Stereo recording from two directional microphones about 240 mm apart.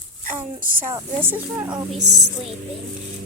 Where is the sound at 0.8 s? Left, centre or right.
Centre.